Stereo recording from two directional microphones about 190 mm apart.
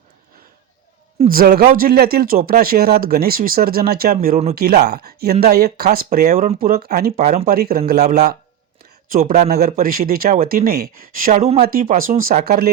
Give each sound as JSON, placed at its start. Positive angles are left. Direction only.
{"t": 1.3, "sound": "speech", "side_deg": -50}
{"t": 7.2, "sound": "speech", "side_deg": -35}
{"t": 7.4, "sound": "speech", "side_deg": -50}
{"t": 9.1, "sound": "speech", "side_deg": -45}
{"t": 11.6, "sound": "speech", "side_deg": -50}